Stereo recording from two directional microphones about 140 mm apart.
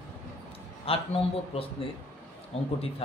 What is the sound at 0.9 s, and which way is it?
Speech, 45° left (ahead or behind).